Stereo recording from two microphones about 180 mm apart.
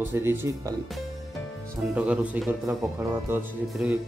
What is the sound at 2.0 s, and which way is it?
Speech, 5° right (ahead or behind).